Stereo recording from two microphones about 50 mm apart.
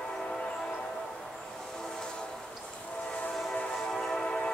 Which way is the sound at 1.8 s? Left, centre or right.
Centre.